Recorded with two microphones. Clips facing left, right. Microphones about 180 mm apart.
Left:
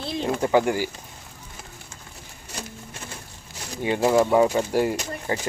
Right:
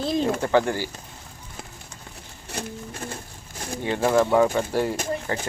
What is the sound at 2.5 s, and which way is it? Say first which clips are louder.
Patter: right 5 dB; 50° right (ahead or behind).